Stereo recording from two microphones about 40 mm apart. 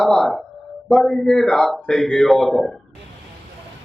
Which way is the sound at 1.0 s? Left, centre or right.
Left.